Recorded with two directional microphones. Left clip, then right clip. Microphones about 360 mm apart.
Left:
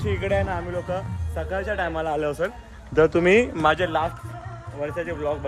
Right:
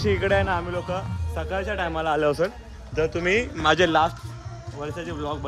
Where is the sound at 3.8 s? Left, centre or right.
Right.